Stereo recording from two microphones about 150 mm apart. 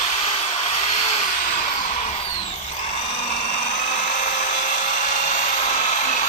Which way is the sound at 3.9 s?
60° left (ahead or behind).